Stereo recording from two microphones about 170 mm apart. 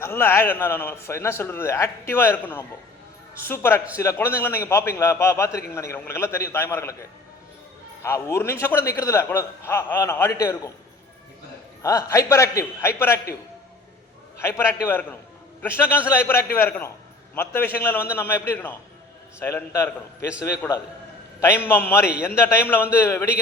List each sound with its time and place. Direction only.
0.0 s a man's voice: 15° left (ahead or behind)
8.0 s a man's voice: 15° left (ahead or behind)
11.8 s a man's voice: 20° left (ahead or behind)
14.3 s a man's voice: 15° left (ahead or behind)